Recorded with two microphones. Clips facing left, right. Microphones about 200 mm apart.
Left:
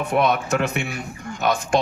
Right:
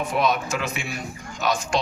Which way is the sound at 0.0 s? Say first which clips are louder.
Left 3 dB; 60° left (ahead or behind).